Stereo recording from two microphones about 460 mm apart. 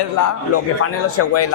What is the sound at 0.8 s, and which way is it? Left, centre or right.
Speech, left.